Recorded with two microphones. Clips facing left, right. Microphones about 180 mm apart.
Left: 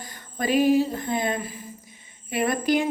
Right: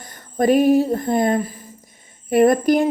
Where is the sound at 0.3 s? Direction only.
55° right (ahead or behind).